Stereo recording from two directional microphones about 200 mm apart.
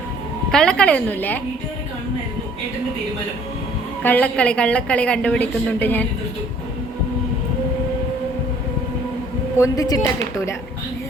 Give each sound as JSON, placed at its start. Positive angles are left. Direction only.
{"t": 0.5, "sound": "a woman's voice", "side_deg": 5}
{"t": 4.0, "sound": "a woman's voice", "side_deg": 10}
{"t": 9.6, "sound": "a woman's voice", "side_deg": 20}